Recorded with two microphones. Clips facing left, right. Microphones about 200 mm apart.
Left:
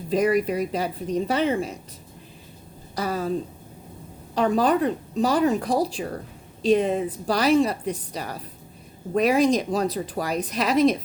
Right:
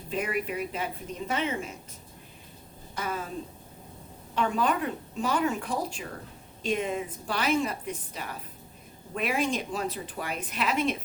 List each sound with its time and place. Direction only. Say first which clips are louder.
0.1 s a woman's voice: left 10 dB; 40° left (ahead or behind)
2.9 s a woman's voice: left 8 dB; 35° left (ahead or behind)
4.4 s a woman's voice: left 7 dB; 35° left (ahead or behind)